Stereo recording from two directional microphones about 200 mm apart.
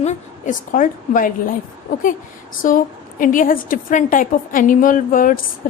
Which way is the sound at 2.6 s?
45° left (ahead or behind).